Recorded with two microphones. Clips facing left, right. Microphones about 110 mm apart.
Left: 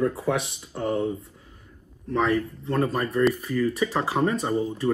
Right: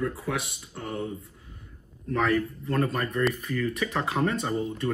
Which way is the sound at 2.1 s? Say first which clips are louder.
Left 2 dB; 20° left (ahead or behind).